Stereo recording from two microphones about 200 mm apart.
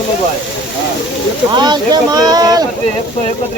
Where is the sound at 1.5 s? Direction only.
20° right (ahead or behind).